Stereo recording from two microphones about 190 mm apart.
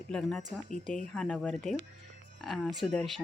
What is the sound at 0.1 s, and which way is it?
Speech, 5° left (ahead or behind).